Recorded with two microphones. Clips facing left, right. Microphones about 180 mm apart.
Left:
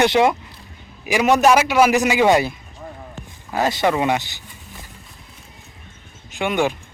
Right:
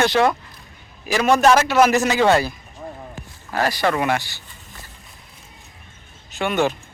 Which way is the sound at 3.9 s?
20° left (ahead or behind).